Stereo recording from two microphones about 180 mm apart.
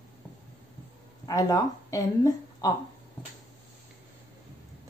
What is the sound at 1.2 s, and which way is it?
Speech, 20° left (ahead or behind).